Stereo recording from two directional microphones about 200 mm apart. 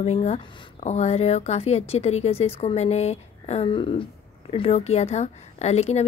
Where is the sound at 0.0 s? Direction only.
30° left (ahead or behind).